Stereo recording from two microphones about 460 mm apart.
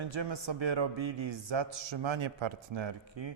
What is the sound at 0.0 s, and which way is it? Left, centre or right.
A man's voice, right.